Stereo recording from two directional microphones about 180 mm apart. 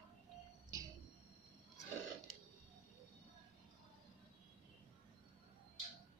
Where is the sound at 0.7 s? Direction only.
20° right (ahead or behind).